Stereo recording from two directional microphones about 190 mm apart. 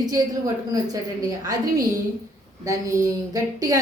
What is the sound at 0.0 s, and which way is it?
A woman's voice, 20° right (ahead or behind).